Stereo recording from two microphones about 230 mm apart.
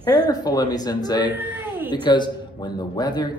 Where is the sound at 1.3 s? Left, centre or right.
Centre.